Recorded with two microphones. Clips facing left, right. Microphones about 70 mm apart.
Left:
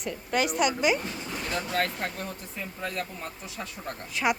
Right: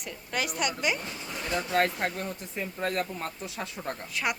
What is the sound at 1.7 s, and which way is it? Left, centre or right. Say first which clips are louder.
Speech: right 4 dB; right.